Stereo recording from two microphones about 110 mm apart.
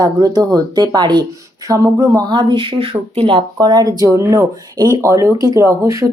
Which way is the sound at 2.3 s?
45° right (ahead or behind).